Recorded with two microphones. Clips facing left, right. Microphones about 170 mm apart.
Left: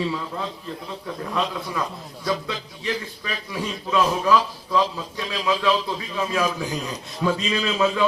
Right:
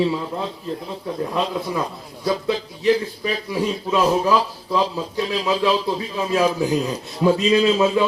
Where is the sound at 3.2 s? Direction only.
25° right (ahead or behind).